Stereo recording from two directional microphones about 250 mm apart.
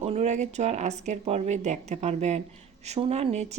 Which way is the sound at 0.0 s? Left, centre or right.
Right.